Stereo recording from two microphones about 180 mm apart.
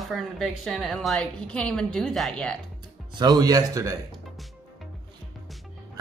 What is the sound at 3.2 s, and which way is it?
Speech, 20° right (ahead or behind).